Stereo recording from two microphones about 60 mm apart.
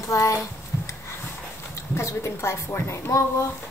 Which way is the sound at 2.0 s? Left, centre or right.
Left.